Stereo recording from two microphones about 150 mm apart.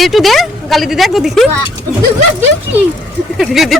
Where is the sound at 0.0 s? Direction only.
Centre (ahead or behind).